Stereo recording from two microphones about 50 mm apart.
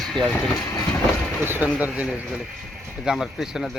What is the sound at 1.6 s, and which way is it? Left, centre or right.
Speech, right.